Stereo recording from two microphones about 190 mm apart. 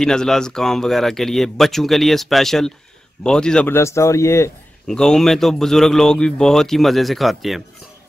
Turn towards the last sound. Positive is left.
turn(degrees=0)  # may be behind; listen again after turning